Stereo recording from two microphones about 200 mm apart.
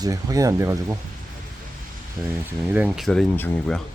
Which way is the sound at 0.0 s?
15° right (ahead or behind).